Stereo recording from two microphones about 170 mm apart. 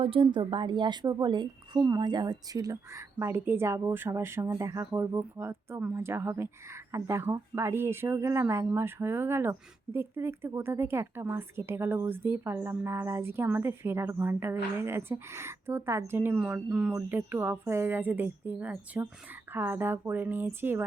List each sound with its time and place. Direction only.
0.0 s a woman's voice: 35° right (ahead or behind); by 20.8 s 15° right (ahead or behind)